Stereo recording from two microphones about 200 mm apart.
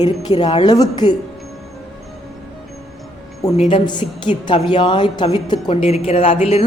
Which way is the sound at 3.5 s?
25° left (ahead or behind).